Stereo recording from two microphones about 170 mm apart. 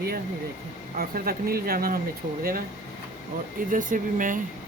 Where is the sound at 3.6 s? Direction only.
50° right (ahead or behind).